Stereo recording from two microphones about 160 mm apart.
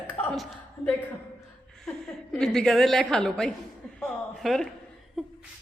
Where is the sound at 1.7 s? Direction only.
5° left (ahead or behind).